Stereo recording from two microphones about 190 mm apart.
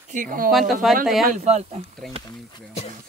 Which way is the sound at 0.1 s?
45° right (ahead or behind).